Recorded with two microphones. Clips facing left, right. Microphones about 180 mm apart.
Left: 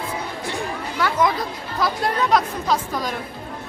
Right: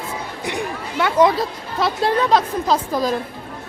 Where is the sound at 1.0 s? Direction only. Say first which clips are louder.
Right 5 dB; 30° right (ahead or behind).